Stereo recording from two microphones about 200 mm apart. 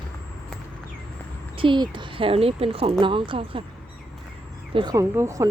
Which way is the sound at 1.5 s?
25° right (ahead or behind).